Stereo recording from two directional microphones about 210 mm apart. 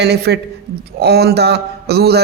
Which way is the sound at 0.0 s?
50° right (ahead or behind).